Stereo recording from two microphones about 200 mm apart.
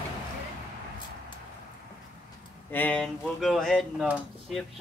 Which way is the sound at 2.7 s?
5° left (ahead or behind).